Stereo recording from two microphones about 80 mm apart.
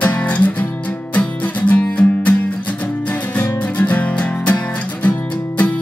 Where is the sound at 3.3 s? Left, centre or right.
Centre.